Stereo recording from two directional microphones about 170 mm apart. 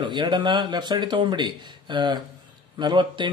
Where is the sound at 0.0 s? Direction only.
25° right (ahead or behind).